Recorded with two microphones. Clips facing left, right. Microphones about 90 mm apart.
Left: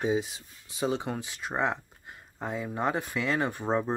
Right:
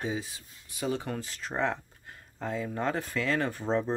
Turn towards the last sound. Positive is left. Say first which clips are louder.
# left 1 dB
turn(degrees=15)  # may be behind; listen again after turning